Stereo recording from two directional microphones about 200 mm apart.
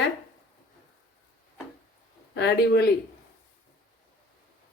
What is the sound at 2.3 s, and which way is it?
Speech, 60° left (ahead or behind).